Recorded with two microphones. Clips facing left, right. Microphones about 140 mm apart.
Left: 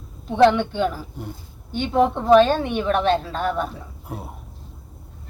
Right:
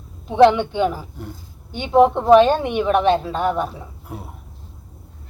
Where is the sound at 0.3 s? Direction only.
15° right (ahead or behind).